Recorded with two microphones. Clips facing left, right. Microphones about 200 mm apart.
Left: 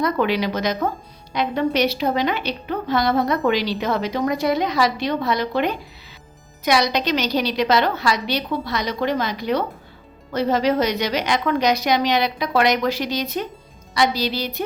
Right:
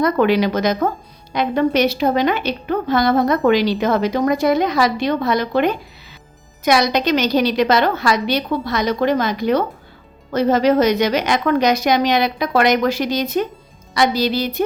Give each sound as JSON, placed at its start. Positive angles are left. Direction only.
{"t": 0.0, "sound": "a woman's voice", "side_deg": -50}